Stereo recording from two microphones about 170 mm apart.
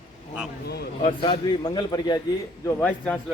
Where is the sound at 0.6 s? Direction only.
70° left (ahead or behind).